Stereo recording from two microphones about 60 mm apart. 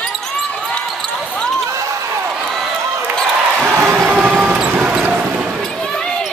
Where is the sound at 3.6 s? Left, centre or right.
Right.